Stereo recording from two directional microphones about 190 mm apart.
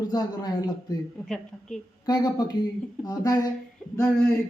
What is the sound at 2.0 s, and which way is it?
A man's voice, 20° left (ahead or behind).